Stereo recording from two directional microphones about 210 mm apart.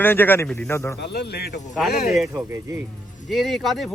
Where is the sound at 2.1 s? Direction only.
15° right (ahead or behind).